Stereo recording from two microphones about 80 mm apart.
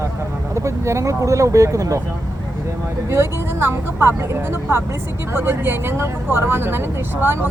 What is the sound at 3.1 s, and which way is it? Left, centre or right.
Speech, right.